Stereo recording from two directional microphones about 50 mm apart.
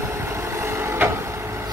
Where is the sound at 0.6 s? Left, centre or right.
Right.